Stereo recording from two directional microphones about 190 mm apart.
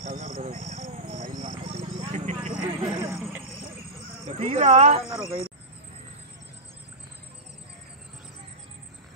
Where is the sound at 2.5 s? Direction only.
25° right (ahead or behind).